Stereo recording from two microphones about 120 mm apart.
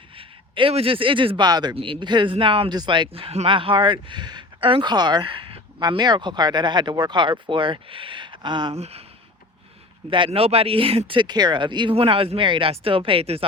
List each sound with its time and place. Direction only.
0.2 s speech: 45° right (ahead or behind)
1.7 s speech: 45° right (ahead or behind)
8.7 s speech: 60° right (ahead or behind)
10.1 s speech: 50° right (ahead or behind)